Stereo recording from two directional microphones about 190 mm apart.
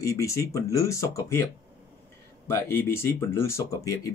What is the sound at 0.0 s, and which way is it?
Speech, 15° left (ahead or behind).